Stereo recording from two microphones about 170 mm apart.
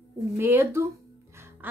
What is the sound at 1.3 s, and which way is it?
Music, 15° right (ahead or behind).